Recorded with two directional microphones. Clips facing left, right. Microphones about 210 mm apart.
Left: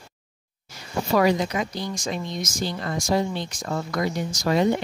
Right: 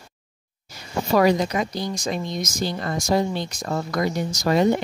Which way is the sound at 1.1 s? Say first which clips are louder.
Right 2 dB; 40° right (ahead or behind).